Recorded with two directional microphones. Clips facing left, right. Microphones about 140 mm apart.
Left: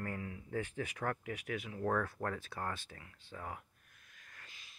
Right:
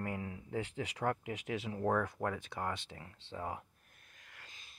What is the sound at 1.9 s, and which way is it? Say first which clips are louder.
Speech: right 2 dB; 15° right (ahead or behind).